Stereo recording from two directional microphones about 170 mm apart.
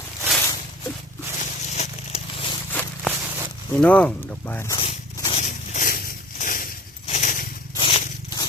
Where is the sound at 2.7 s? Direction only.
10° left (ahead or behind).